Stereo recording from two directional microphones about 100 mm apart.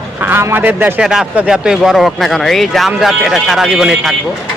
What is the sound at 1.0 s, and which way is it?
Speech, 5° right (ahead or behind).